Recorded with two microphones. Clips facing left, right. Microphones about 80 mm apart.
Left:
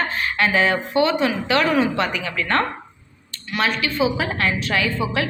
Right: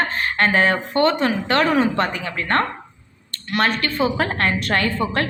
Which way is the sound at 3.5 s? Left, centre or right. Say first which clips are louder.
Right 2 dB; right.